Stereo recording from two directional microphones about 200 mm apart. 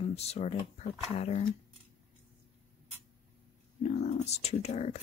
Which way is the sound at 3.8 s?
35° left (ahead or behind).